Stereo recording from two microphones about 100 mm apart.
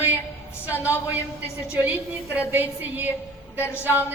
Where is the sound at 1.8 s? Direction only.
15° right (ahead or behind).